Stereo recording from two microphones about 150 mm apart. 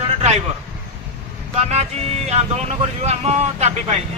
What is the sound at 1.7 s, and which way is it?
Speech, 45° right (ahead or behind).